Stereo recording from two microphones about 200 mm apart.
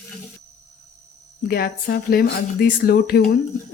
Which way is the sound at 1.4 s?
50° left (ahead or behind).